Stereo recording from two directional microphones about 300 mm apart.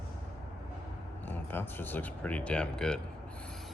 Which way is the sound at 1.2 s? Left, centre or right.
Centre.